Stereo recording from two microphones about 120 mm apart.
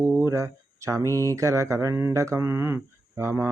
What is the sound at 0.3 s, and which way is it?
Speech, 25° right (ahead or behind).